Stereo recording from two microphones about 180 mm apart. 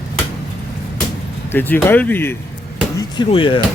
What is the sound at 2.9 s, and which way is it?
Speech, 25° left (ahead or behind).